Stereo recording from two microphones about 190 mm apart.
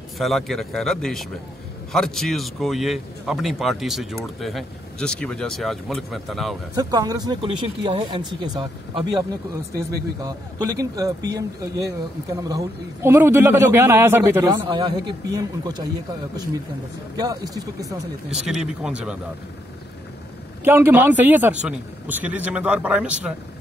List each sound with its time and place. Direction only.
0.2 s a man's voice: centre (ahead or behind)
6.7 s speech: 20° right (ahead or behind)
10.2 s a man's voice: 20° right (ahead or behind)
17.2 s a man's voice: 20° right (ahead or behind)
18.5 s a man's voice: 5° right (ahead or behind)
20.6 s a man's voice: 10° right (ahead or behind)